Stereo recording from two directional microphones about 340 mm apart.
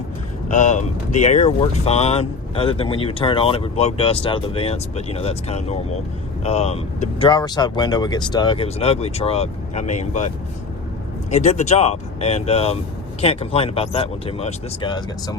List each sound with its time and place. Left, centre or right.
0.4 s speech: left